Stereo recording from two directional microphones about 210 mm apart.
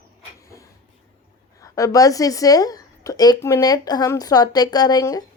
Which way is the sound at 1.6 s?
15° left (ahead or behind).